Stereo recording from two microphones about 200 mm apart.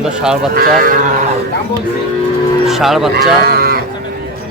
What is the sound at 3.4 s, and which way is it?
Livestock, 50° right (ahead or behind).